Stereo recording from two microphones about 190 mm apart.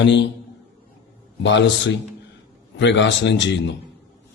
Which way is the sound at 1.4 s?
70° left (ahead or behind).